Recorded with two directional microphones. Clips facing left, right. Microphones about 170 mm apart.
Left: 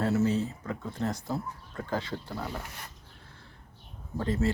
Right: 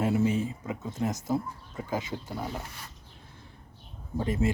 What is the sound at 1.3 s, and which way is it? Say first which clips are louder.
Speech: right 4 dB; 10° right (ahead or behind).